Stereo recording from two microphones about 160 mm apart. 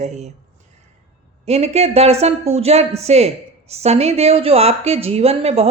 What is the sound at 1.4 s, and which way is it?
A woman's voice, 40° right (ahead or behind).